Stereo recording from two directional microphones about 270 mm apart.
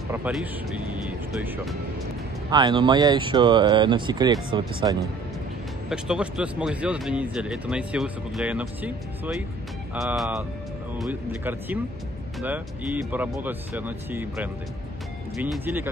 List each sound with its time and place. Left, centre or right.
0.1 s speech: centre
2.5 s speech: centre
5.9 s speech: centre